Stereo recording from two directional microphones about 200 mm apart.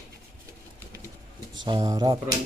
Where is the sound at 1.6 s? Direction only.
25° right (ahead or behind).